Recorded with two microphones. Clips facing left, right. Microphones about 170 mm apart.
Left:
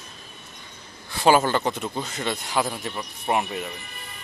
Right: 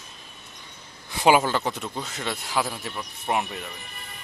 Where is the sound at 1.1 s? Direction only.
15° right (ahead or behind).